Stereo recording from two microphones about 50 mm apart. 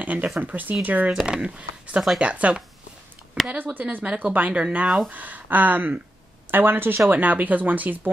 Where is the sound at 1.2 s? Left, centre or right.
Centre.